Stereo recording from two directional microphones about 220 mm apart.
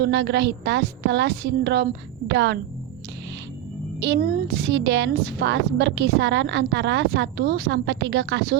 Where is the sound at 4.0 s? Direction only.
50° right (ahead or behind).